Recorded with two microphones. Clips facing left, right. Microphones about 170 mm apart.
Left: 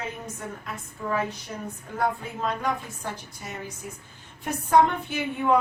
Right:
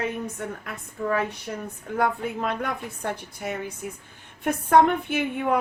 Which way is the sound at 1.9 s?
60° right (ahead or behind).